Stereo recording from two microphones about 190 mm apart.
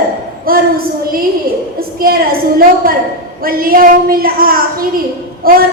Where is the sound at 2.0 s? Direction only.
50° right (ahead or behind).